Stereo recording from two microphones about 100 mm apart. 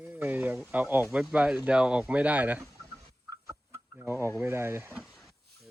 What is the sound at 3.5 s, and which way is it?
Chicken, 20° right (ahead or behind).